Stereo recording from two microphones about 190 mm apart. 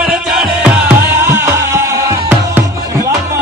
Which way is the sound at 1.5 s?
15° right (ahead or behind).